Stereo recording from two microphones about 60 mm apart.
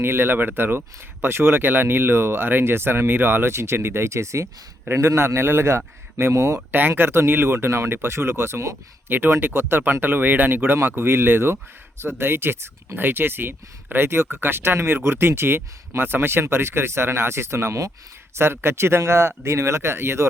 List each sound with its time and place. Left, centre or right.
0.0 s speech: right
6.7 s speech: right